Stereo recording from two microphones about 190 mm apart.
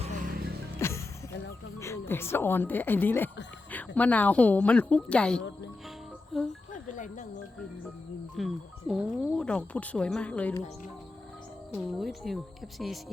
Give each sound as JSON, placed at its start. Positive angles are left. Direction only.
{"t": 0.0, "sound": "music", "side_deg": -40}
{"t": 0.8, "sound": "music", "side_deg": 15}
{"t": 1.8, "sound": "speech", "side_deg": 15}
{"t": 6.8, "sound": "music", "side_deg": 40}
{"t": 8.4, "sound": "speech", "side_deg": 0}
{"t": 11.7, "sound": "speech", "side_deg": 0}